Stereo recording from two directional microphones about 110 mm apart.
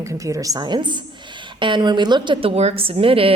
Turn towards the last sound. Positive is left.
turn(degrees=-60)  # may be behind; listen again after turning